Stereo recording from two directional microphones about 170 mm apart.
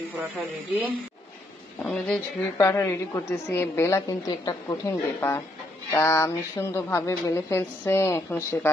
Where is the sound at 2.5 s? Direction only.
20° left (ahead or behind).